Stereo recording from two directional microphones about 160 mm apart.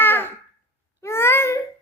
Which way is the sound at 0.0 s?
15° left (ahead or behind).